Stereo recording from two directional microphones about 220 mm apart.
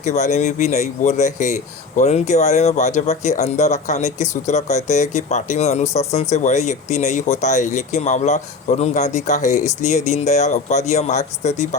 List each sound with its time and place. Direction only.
0.0 s speech: 30° left (ahead or behind)